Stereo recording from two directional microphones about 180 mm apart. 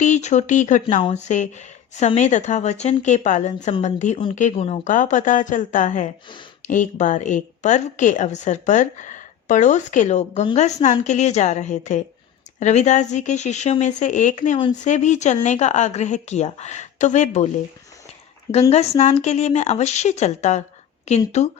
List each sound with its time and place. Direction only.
0.0 s a woman's voice: 40° left (ahead or behind)
18.7 s speech: 40° left (ahead or behind)